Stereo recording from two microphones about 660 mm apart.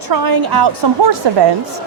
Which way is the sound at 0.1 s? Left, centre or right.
Right.